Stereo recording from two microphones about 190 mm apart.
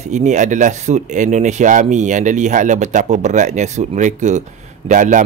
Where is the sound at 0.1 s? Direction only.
40° right (ahead or behind).